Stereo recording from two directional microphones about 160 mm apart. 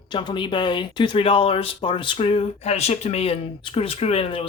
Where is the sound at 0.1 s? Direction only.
30° left (ahead or behind).